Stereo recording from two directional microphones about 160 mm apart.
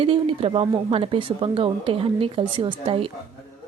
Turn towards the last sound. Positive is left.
turn(degrees=-35)  # may be behind; listen again after turning